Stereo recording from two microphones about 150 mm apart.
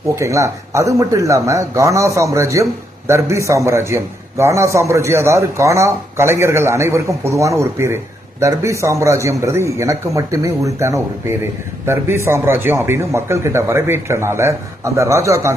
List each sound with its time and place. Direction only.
0.2 s a man's voice: 20° right (ahead or behind)